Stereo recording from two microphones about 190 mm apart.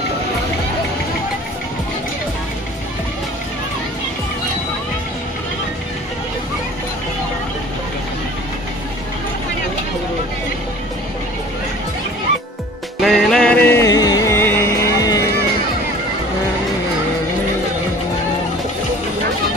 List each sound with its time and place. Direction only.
13.0 s music: centre (ahead or behind); by 15.2 s 15° left (ahead or behind)